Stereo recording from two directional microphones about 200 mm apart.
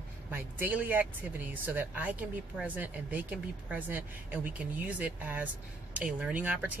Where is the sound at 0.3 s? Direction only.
10° right (ahead or behind).